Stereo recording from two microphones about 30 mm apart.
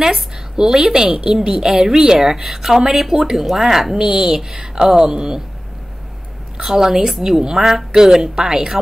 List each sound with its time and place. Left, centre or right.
0.0 s a woman's voice: centre
6.6 s speech: centre